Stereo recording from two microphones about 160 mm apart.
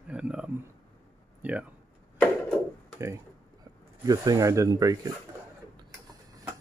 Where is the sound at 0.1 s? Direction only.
5° right (ahead or behind).